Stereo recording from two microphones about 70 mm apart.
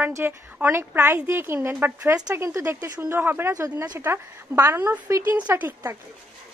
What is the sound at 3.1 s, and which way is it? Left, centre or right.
Speech, right.